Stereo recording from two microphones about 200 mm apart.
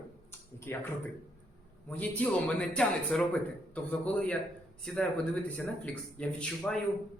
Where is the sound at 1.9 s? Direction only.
10° left (ahead or behind).